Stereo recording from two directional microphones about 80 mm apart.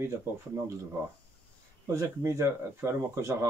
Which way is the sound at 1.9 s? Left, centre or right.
Right.